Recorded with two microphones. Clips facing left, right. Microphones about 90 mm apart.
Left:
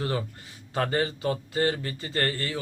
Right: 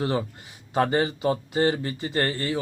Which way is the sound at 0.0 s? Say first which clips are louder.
Right 4 dB; 20° right (ahead or behind).